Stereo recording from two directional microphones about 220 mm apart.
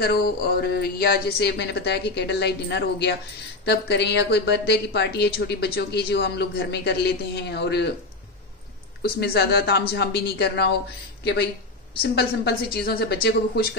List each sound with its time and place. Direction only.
0.0 s a woman's voice: 45° left (ahead or behind)
9.2 s a woman's voice: 45° left (ahead or behind)
12.0 s a woman's voice: 45° left (ahead or behind)